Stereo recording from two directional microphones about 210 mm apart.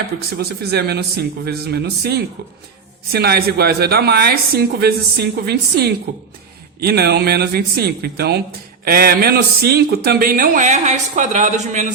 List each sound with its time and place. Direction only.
0.3 s speech: 50° right (ahead or behind)